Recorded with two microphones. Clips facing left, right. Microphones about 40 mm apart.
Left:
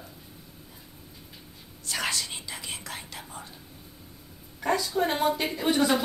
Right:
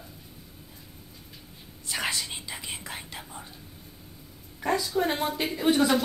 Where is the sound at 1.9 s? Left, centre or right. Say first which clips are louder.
Even; centre.